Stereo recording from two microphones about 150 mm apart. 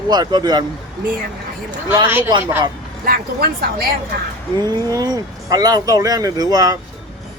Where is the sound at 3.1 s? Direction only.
85° right.